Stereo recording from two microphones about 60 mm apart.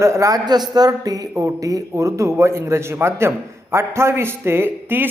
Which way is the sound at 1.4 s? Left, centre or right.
Right.